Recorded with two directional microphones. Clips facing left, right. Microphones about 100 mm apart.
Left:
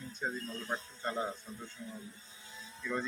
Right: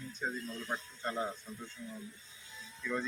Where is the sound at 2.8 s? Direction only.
10° left (ahead or behind).